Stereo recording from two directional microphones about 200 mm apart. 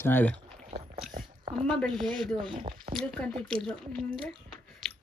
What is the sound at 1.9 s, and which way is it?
Speech, 25° right (ahead or behind).